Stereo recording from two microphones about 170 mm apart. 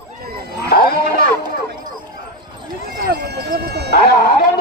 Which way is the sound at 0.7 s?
60° left (ahead or behind).